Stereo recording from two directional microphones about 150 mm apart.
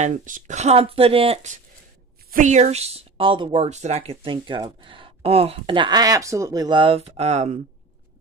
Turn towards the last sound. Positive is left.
turn(degrees=-50)  # may be behind; listen again after turning